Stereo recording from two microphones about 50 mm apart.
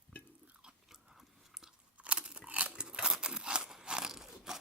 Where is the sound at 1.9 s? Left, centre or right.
Right.